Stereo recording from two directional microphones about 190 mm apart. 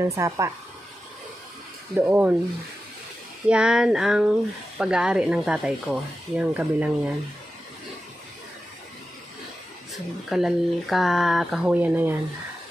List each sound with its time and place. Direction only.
0.0 s speech: 15° right (ahead or behind)
2.0 s speech: 10° right (ahead or behind)
3.4 s speech: 5° right (ahead or behind)
10.3 s speech: centre (ahead or behind)